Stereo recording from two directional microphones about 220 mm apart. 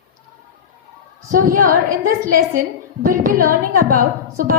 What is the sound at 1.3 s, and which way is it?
A woman's voice, 40° right (ahead or behind).